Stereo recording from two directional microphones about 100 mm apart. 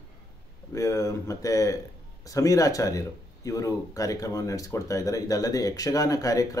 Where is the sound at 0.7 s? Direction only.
30° left (ahead or behind).